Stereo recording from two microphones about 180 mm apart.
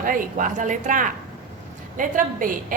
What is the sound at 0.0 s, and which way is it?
A woman's voice, 50° right (ahead or behind).